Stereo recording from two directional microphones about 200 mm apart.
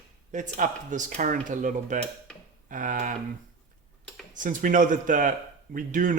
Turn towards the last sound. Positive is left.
turn(degrees=-40)  # may be behind; listen again after turning